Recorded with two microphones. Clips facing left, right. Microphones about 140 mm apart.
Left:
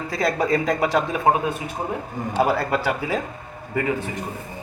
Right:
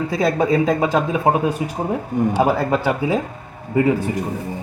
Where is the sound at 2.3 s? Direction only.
15° right (ahead or behind).